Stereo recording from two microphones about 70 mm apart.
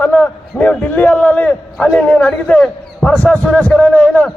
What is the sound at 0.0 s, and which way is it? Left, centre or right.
A man's voice, left.